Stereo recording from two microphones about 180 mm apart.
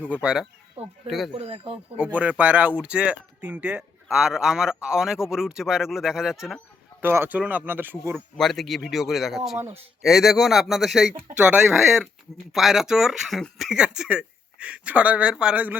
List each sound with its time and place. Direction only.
0.0 s speech: 5° right (ahead or behind)
1.3 s speech: 35° right (ahead or behind)
2.4 s speech: 10° right (ahead or behind)
8.4 s speech: centre (ahead or behind)